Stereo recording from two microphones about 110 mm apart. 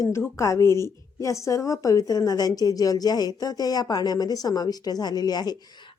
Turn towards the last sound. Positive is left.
turn(degrees=40)  # may be behind; listen again after turning